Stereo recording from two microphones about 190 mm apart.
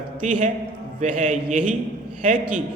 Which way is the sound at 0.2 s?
40° right (ahead or behind).